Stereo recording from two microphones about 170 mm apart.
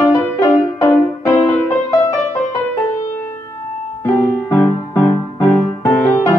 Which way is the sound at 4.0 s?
20° left (ahead or behind).